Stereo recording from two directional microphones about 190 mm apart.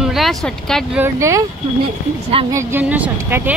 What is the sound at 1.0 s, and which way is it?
Speech, 15° right (ahead or behind).